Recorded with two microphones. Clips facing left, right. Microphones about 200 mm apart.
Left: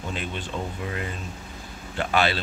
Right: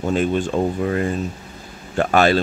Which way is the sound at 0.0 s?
45° right (ahead or behind).